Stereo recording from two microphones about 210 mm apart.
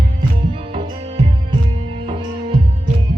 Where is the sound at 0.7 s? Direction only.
25° right (ahead or behind).